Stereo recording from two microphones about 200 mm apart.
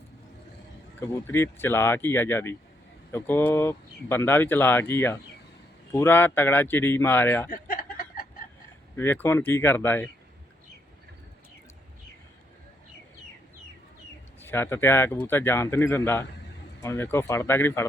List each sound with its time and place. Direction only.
0.9 s speech: 15° left (ahead or behind)
7.5 s a sound: 45° left (ahead or behind)
9.0 s speech: 10° left (ahead or behind)
14.4 s speech: 10° left (ahead or behind)